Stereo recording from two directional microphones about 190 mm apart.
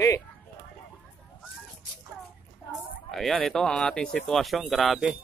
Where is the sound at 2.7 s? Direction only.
Centre (ahead or behind).